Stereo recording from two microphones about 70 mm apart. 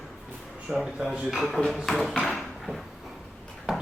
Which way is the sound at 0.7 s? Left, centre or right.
Centre.